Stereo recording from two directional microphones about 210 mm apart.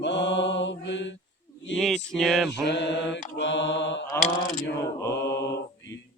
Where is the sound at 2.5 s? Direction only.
55° left (ahead or behind).